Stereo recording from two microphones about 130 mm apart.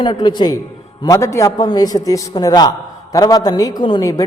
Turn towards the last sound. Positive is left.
turn(degrees=30)  # may be behind; listen again after turning